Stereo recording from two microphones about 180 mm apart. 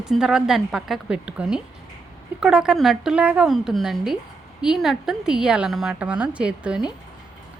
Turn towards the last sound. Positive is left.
turn(degrees=-5)  # may be behind; listen again after turning